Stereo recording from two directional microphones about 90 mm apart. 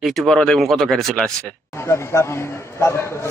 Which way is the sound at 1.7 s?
30° left (ahead or behind).